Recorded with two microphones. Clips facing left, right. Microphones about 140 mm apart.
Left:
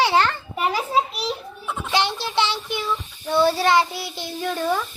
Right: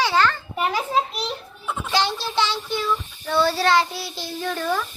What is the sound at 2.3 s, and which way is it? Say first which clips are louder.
A child's voice: left 1 dB; 25° left (ahead or behind).